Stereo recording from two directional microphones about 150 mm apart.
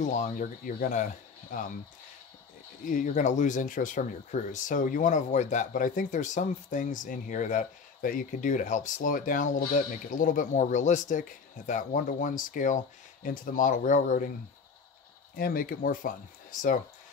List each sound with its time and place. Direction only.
0.0 s speech: 55° left (ahead or behind)
2.8 s speech: 60° left (ahead or behind)
15.3 s speech: 75° left (ahead or behind)